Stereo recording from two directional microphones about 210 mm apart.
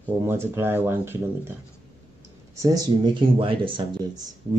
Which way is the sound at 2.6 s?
15° right (ahead or behind).